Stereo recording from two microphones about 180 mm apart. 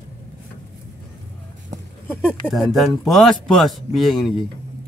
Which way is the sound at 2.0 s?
5° left (ahead or behind).